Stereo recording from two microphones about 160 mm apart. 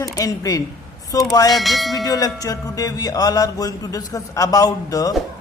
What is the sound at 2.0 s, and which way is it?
Music, 25° left (ahead or behind).